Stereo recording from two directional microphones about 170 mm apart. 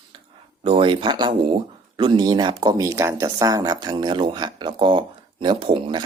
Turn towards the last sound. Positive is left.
turn(degrees=-30)  # may be behind; listen again after turning